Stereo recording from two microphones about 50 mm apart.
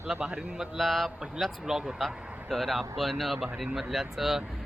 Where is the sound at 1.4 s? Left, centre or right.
Centre.